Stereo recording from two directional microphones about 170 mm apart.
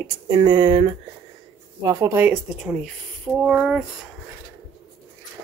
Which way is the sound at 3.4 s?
Centre (ahead or behind).